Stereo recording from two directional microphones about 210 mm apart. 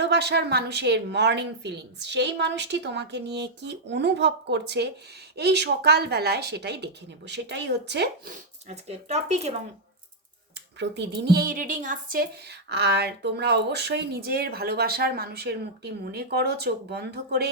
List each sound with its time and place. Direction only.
0.0 s a woman's voice: 50° right (ahead or behind)
8.7 s speech: 30° right (ahead or behind)
10.8 s a woman's voice: 55° right (ahead or behind)